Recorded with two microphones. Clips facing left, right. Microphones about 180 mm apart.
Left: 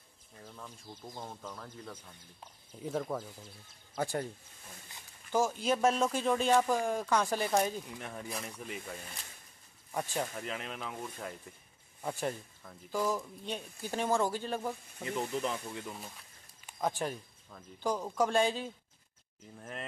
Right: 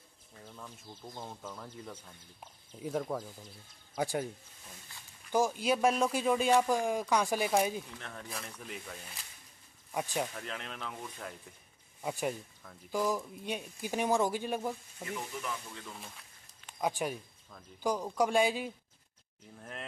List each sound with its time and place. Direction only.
1.1 s speech: centre (ahead or behind)
5.3 s speech: 10° right (ahead or behind)
7.8 s speech: 10° left (ahead or behind)
9.9 s speech: 10° right (ahead or behind)
10.3 s speech: 5° left (ahead or behind)
12.0 s speech: 10° right (ahead or behind)
15.1 s speech: 30° left (ahead or behind)
16.8 s speech: 10° right (ahead or behind)